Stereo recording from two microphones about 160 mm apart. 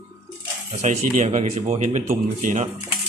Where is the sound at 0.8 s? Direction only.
50° right (ahead or behind).